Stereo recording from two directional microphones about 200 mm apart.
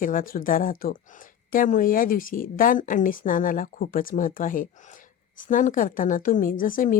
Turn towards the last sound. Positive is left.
turn(degrees=45)  # may be behind; listen again after turning